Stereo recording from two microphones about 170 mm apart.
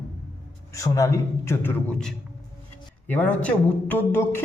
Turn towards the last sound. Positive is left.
turn(degrees=15)  # may be behind; listen again after turning